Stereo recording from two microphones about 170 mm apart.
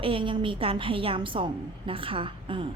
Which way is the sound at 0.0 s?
30° right (ahead or behind).